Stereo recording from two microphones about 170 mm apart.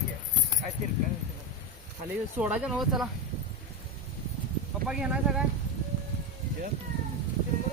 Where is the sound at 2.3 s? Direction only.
5° right (ahead or behind).